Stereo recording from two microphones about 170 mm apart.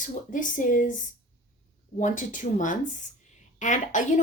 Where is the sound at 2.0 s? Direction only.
50° left (ahead or behind).